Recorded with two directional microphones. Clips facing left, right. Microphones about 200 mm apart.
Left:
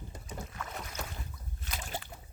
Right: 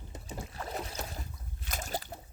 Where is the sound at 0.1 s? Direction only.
35° right (ahead or behind).